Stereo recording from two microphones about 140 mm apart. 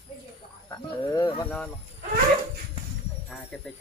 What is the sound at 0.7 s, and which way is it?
Speech, 25° left (ahead or behind).